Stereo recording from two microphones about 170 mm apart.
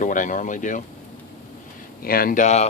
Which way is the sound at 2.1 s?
60° left (ahead or behind).